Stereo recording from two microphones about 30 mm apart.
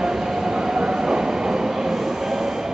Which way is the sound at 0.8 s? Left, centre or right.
Right.